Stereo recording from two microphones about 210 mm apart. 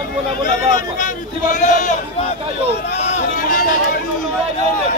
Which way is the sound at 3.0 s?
35° left (ahead or behind).